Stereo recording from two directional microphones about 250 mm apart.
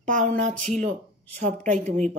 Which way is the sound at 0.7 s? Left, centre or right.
Right.